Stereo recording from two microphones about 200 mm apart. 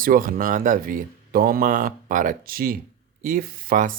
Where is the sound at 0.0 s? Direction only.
45° right (ahead or behind).